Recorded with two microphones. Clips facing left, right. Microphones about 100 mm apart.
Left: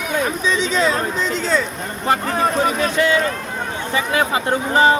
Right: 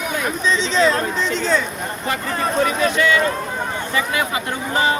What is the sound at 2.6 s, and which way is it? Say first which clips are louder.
Speech: even; 30° left (ahead or behind).